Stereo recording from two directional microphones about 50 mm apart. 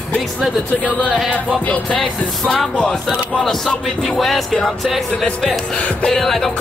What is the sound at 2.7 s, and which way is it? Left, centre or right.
Music, centre.